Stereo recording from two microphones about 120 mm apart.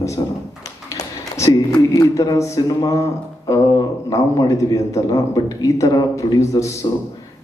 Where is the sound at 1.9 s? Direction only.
30° left (ahead or behind).